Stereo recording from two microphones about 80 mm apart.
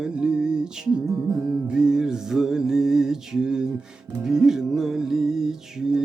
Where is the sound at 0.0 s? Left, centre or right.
Centre.